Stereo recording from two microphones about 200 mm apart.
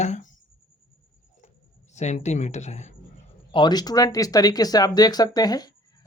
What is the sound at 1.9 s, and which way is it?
Speech, 35° left (ahead or behind).